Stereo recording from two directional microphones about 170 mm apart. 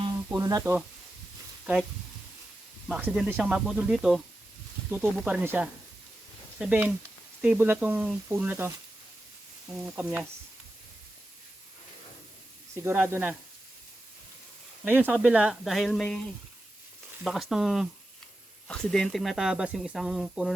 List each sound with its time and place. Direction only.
0.3 s speech: 20° right (ahead or behind)
0.6 s speech: 10° right (ahead or behind)
2.9 s speech: 10° right (ahead or behind)
9.8 s speech: 5° right (ahead or behind)
12.8 s speech: 15° right (ahead or behind)
14.8 s speech: 10° right (ahead or behind); by 16.2 s 5° left (ahead or behind)
17.2 s speech: centre (ahead or behind)